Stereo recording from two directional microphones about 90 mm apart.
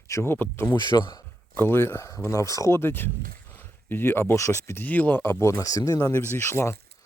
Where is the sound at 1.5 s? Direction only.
25° left (ahead or behind); by 6.1 s 40° left (ahead or behind).